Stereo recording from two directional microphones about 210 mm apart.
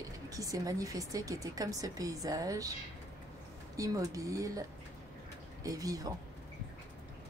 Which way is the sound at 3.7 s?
15° right (ahead or behind).